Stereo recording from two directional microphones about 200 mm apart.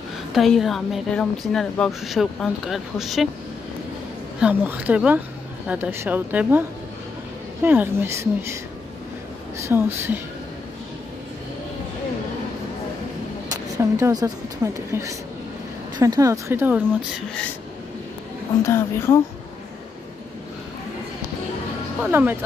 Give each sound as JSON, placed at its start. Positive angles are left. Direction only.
{"t": 0.3, "sound": "a woman's voice", "side_deg": 0}
{"t": 4.4, "sound": "a woman's voice", "side_deg": -5}
{"t": 7.6, "sound": "a woman's voice", "side_deg": -10}
{"t": 9.7, "sound": "a woman's voice", "side_deg": -10}
{"t": 13.5, "sound": "a woman's voice", "side_deg": -15}
{"t": 18.6, "sound": "speech", "side_deg": 15}
{"t": 22.1, "sound": "a woman's voice", "side_deg": -10}